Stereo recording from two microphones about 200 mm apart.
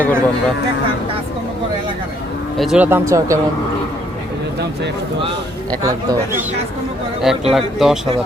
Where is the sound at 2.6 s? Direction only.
5° right (ahead or behind).